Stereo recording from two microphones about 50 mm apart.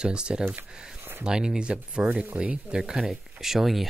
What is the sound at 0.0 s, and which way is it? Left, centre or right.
Speech, centre.